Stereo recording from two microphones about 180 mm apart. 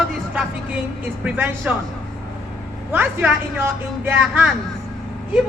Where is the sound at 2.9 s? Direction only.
10° right (ahead or behind).